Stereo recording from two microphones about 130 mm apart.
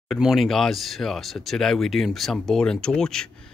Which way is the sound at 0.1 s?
Centre (ahead or behind).